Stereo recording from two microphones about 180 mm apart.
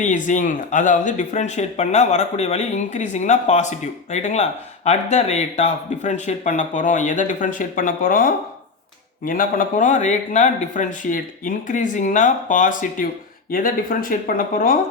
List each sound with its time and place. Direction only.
0.0 s speech: 45° left (ahead or behind)